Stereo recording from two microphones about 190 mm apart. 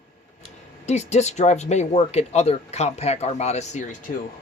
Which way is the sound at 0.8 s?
35° left (ahead or behind).